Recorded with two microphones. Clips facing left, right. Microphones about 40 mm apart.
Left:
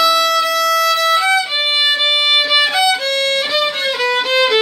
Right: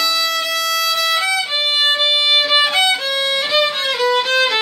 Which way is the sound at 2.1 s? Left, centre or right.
Centre.